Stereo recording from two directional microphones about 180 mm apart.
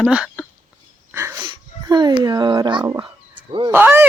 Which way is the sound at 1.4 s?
25° right (ahead or behind).